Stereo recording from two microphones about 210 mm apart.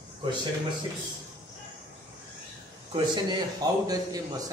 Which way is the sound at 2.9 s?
20° right (ahead or behind).